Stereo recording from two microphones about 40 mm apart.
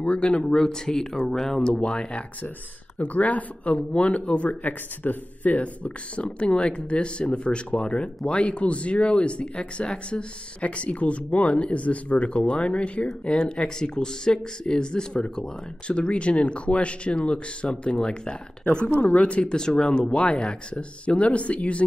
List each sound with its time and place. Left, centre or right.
0.0 s speech: left
0.6 s speech: centre
1.8 s speech: left
3.0 s speech: left
19.5 s speech: centre